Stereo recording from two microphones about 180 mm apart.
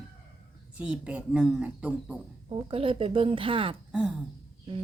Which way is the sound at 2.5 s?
30° right (ahead or behind).